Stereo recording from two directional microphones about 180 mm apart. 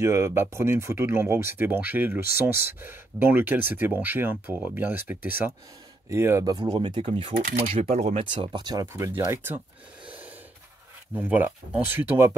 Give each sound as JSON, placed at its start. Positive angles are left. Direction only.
{"t": 0.0, "sound": "speech", "side_deg": -15}
{"t": 8.3, "sound": "speech", "side_deg": -25}
{"t": 11.1, "sound": "speech", "side_deg": -10}